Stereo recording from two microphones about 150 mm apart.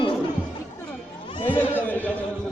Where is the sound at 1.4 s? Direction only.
10° left (ahead or behind).